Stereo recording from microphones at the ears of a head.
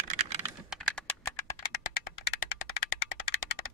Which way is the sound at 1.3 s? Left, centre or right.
Left.